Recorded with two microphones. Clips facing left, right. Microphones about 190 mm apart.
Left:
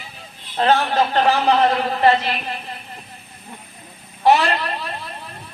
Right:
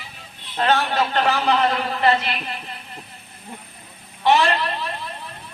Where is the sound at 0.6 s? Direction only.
35° left (ahead or behind).